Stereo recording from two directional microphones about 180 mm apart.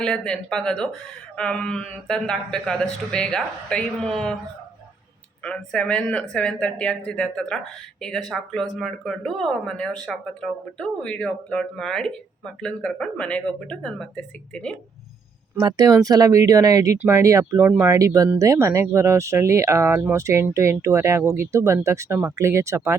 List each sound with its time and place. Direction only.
0.0 s speech: 5° left (ahead or behind)
5.4 s speech: 5° left (ahead or behind)
15.5 s speech: 20° right (ahead or behind)